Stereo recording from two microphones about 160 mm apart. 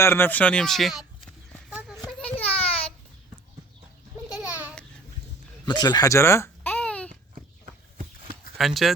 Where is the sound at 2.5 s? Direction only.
35° left (ahead or behind).